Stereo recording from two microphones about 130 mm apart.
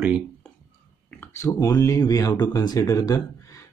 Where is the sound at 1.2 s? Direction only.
20° left (ahead or behind).